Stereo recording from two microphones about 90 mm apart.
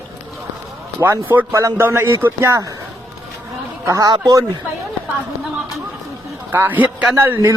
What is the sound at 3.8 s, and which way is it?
Speech, 40° right (ahead or behind).